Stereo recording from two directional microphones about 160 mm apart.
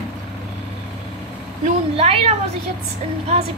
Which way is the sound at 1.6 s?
40° right (ahead or behind).